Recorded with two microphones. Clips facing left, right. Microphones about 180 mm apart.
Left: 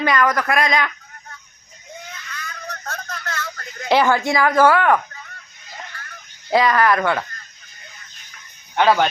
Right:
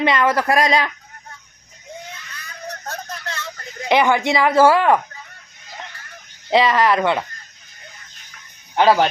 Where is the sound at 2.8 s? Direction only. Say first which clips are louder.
Left 1 dB; 30° right (ahead or behind).